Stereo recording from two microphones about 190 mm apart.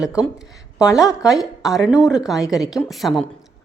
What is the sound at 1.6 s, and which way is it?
A woman's voice, centre (ahead or behind).